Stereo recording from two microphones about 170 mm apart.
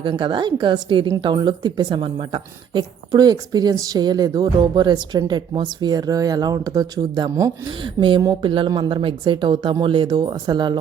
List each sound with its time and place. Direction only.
0.0 s speech: 25° right (ahead or behind)